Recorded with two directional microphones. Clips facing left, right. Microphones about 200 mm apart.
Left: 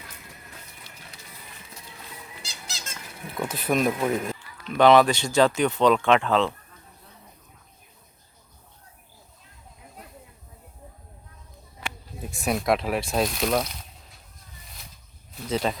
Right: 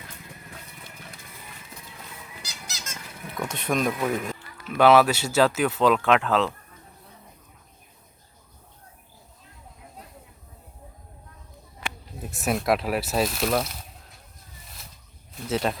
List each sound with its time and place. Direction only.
2.4 s squawk: 30° left (ahead or behind)
3.2 s speech: 5° left (ahead or behind)
4.6 s speech: 5° right (ahead or behind)
12.2 s speech: centre (ahead or behind)
15.4 s speech: centre (ahead or behind)